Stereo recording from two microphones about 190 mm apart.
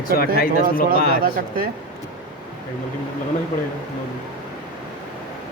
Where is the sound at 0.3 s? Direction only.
50° left (ahead or behind).